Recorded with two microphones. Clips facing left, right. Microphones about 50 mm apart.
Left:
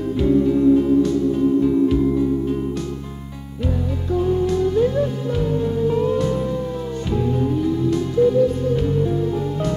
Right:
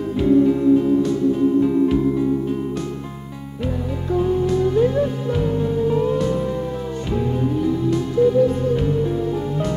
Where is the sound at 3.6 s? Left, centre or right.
Centre.